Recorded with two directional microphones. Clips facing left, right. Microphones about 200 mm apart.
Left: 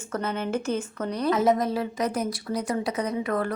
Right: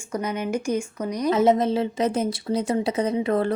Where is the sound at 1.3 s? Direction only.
25° right (ahead or behind).